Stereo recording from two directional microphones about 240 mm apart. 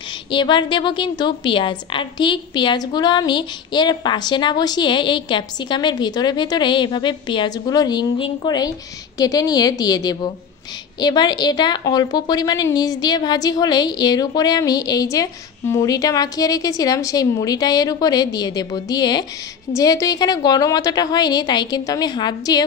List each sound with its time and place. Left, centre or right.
0.3 s a woman's voice: centre